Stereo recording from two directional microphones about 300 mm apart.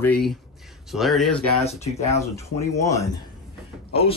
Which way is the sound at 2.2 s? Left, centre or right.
Centre.